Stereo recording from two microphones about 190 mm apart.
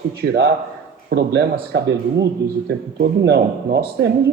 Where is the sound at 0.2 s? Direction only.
55° right (ahead or behind).